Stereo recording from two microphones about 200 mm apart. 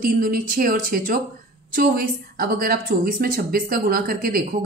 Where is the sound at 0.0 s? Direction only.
45° right (ahead or behind).